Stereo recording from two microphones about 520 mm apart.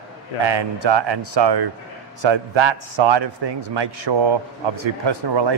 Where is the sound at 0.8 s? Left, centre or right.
Right.